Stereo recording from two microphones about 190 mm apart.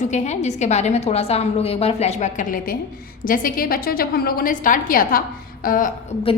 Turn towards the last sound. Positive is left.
turn(degrees=45)  # may be behind; listen again after turning